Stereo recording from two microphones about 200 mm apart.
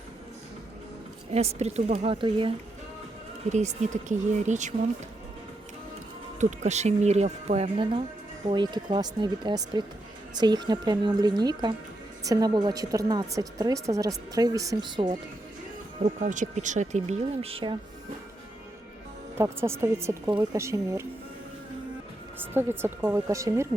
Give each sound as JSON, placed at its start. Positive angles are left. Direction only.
{"t": 1.3, "sound": "speech", "side_deg": -30}
{"t": 3.5, "sound": "speech", "side_deg": -35}
{"t": 6.4, "sound": "a woman's voice", "side_deg": -35}
{"t": 16.0, "sound": "speech", "side_deg": -40}
{"t": 19.4, "sound": "a woman's voice", "side_deg": -10}
{"t": 22.4, "sound": "a woman's voice", "side_deg": -10}